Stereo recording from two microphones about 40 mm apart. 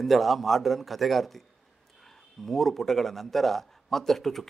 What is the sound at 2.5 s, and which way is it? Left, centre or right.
A man's voice, centre.